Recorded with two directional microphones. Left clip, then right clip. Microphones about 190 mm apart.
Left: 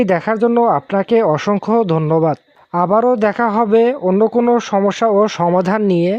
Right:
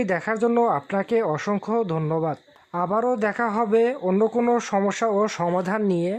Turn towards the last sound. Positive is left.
turn(degrees=35)  # may be behind; listen again after turning